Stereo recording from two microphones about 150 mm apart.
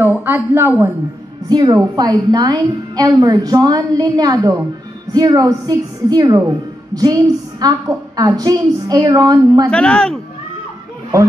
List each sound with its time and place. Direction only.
0.0 s a woman's voice: 15° right (ahead or behind)
1.5 s a woman's voice: 25° right (ahead or behind)
9.7 s speech: 5° left (ahead or behind)